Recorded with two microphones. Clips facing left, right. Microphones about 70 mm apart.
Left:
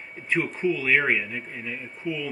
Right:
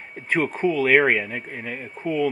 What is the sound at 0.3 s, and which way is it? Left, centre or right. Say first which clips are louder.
Speech: right 3 dB; right.